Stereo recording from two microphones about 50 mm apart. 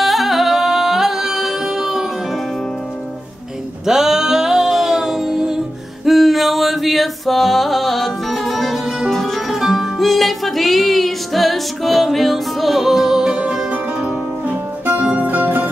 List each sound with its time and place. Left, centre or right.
0.0 s music: centre
3.8 s music: centre
9.5 s music: centre
13.7 s music: right